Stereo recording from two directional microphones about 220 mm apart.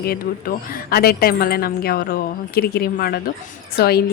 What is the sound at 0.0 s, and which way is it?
A woman's voice, 45° left (ahead or behind).